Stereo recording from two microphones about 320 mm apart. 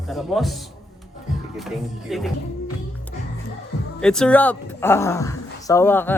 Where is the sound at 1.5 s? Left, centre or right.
Centre.